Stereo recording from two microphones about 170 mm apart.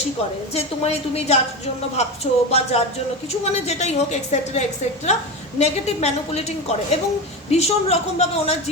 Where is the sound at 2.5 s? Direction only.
40° left (ahead or behind).